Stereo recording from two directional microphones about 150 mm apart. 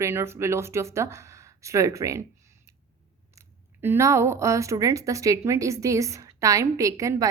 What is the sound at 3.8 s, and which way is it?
A woman's voice, 15° right (ahead or behind).